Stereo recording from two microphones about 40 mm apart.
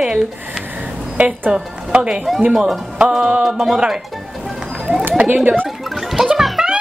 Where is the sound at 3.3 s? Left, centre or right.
Centre.